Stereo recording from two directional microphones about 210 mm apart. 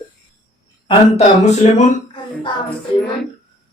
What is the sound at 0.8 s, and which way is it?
Speech, 30° left (ahead or behind).